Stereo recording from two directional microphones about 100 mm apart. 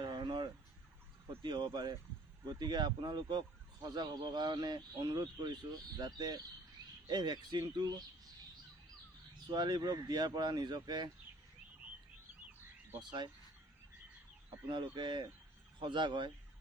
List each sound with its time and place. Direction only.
0.0 s fowl: 50° right (ahead or behind)
1.4 s speech: 50° right (ahead or behind)
9.5 s speech: 45° right (ahead or behind)
13.0 s speech: 50° right (ahead or behind)
14.7 s speech: 50° right (ahead or behind)